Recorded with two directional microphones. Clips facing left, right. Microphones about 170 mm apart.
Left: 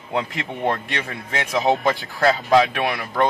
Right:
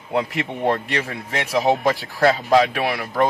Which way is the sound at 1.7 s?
Centre (ahead or behind).